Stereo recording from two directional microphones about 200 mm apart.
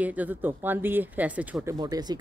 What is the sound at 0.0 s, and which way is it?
Speech, 10° right (ahead or behind).